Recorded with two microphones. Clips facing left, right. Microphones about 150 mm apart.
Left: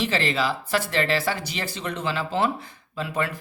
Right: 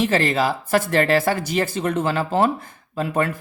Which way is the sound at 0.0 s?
50° right (ahead or behind).